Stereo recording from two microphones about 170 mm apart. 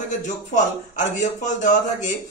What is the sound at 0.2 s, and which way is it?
A man's voice, 45° left (ahead or behind).